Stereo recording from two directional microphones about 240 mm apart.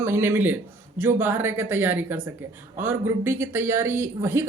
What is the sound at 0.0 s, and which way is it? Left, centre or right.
A man's voice, centre.